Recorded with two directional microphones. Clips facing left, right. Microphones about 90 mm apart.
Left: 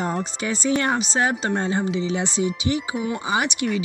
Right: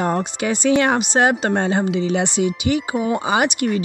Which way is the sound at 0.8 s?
75° right (ahead or behind).